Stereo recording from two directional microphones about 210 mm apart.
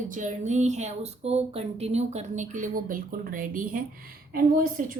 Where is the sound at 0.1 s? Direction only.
35° right (ahead or behind).